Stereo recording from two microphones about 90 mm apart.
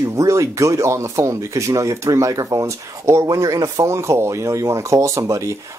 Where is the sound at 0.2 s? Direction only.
35° right (ahead or behind).